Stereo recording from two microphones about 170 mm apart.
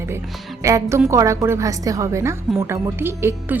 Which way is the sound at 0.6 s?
20° right (ahead or behind).